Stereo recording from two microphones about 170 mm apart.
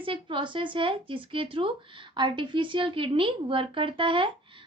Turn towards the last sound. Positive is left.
turn(degrees=-30)  # may be behind; listen again after turning